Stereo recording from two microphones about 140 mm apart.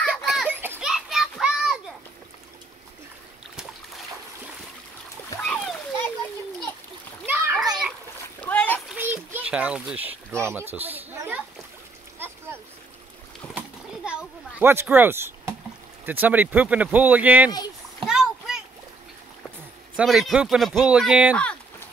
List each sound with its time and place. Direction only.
0.0 s children playing: 5° right (ahead or behind)
0.6 s children playing: 15° right (ahead or behind)
0.8 s children playing: 5° right (ahead or behind)
5.4 s splash: 5° left (ahead or behind)
7.2 s splash: 15° right (ahead or behind)
8.4 s splash: 10° left (ahead or behind)
8.8 s a sound: 10° right (ahead or behind)
13.6 s a sound: 5° right (ahead or behind)
14.6 s speech: 15° right (ahead or behind)
18.0 s splash: centre (ahead or behind)
20.0 s speech: centre (ahead or behind)
21.4 s a sound: 10° left (ahead or behind)